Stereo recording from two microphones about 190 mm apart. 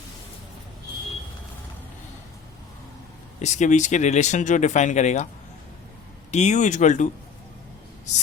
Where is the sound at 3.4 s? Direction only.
40° left (ahead or behind).